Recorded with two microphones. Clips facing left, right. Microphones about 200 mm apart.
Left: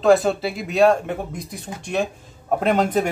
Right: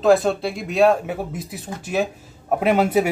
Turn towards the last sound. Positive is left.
turn(degrees=-5)  # may be behind; listen again after turning